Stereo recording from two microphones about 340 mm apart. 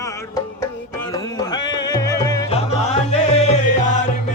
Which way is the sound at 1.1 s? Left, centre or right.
Centre.